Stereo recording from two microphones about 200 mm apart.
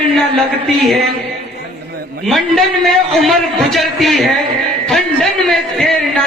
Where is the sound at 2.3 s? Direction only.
Centre (ahead or behind).